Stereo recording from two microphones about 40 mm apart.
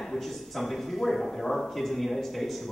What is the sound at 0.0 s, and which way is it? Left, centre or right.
Speech, centre.